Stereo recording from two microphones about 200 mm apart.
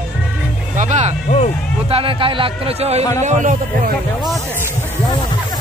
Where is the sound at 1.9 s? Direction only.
25° right (ahead or behind).